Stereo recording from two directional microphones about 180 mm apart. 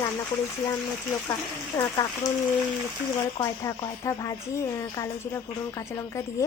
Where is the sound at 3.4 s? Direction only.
15° left (ahead or behind).